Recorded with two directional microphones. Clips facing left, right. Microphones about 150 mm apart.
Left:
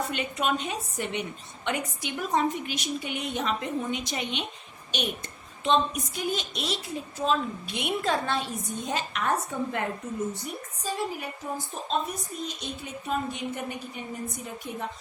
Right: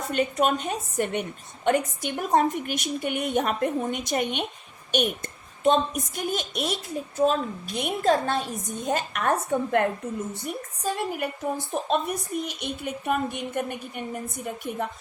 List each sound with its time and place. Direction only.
0.1 s a woman's voice: 45° right (ahead or behind)